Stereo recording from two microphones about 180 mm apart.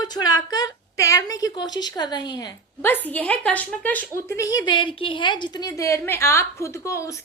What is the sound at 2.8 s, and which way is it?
Speech, 10° left (ahead or behind).